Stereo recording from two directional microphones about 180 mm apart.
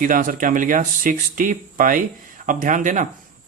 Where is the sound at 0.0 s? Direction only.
50° right (ahead or behind).